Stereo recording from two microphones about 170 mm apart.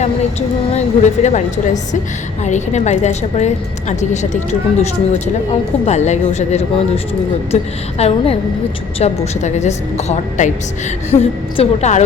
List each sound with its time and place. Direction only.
0.0 s a woman's voice: 40° left (ahead or behind)
5.8 s a woman's voice: 40° left (ahead or behind)